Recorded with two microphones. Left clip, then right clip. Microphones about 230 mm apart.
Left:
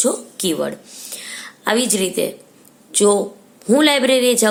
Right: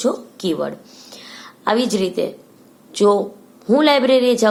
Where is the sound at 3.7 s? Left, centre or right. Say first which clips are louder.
Even; left.